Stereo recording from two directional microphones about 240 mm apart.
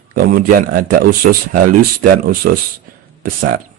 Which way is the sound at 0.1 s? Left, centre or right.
Right.